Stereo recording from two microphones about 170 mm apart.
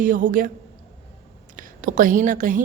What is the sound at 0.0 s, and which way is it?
Speech, 50° right (ahead or behind).